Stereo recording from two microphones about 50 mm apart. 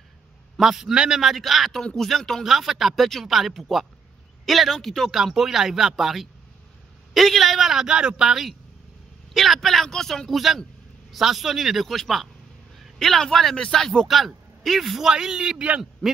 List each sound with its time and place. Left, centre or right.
0.6 s speech: centre
0.9 s a man's voice: centre
1.2 s speech: centre
5.1 s a man's voice: centre
15.0 s a man's voice: centre
16.0 s speech: centre